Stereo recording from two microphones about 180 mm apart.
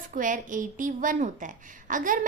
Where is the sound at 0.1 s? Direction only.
45° right (ahead or behind).